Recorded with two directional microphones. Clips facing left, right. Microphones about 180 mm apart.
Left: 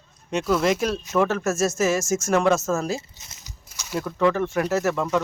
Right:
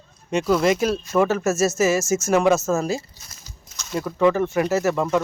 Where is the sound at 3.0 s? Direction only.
20° left (ahead or behind).